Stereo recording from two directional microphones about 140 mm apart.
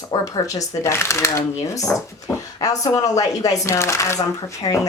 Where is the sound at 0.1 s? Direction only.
20° left (ahead or behind).